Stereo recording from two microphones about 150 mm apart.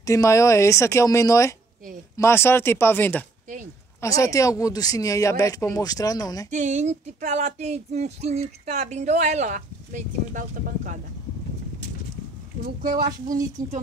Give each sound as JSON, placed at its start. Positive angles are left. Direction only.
{"t": 0.0, "sound": "speech", "side_deg": 20}
{"t": 6.5, "sound": "a sound", "side_deg": -50}
{"t": 12.8, "sound": "speech", "side_deg": -70}